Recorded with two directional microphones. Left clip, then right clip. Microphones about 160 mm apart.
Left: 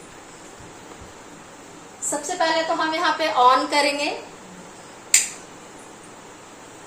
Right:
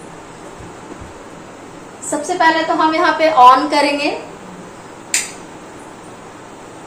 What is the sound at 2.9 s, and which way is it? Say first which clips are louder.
Speech: right 9 dB; 15° left (ahead or behind).